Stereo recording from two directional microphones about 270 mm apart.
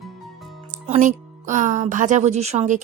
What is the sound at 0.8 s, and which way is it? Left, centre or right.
Speech, right.